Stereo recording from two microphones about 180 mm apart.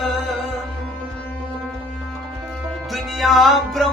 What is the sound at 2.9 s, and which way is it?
Music, centre (ahead or behind).